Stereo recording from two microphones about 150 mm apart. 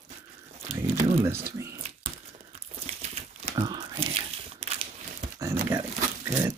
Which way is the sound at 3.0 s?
45° right (ahead or behind).